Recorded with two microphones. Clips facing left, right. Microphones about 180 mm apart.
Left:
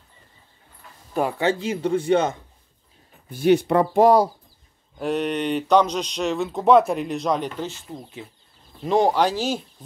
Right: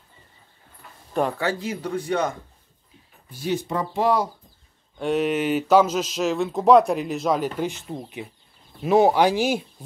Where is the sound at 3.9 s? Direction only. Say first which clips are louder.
Left 5 dB; 45° left (ahead or behind).